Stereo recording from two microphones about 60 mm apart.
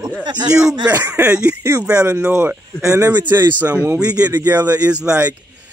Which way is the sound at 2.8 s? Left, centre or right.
Right.